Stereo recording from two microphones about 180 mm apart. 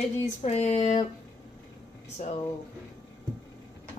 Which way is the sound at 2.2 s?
40° left (ahead or behind).